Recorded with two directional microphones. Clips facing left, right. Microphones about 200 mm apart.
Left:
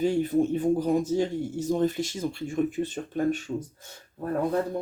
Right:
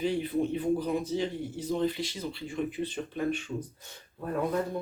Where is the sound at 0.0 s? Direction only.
45° left (ahead or behind).